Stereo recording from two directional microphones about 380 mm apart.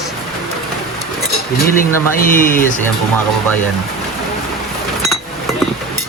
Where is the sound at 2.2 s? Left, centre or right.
Left.